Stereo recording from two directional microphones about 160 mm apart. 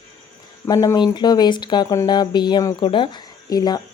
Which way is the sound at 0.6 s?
25° left (ahead or behind).